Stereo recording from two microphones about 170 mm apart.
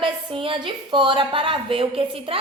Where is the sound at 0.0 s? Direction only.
30° right (ahead or behind).